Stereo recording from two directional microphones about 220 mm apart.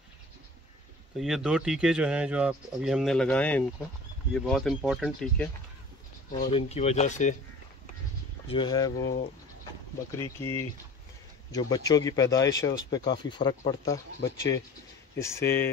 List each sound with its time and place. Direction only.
1.1 s speech: centre (ahead or behind)
6.3 s speech: 30° left (ahead or behind)
8.5 s speech: 20° left (ahead or behind)
8.9 s speech: 55° left (ahead or behind)
10.1 s speech: 15° left (ahead or behind)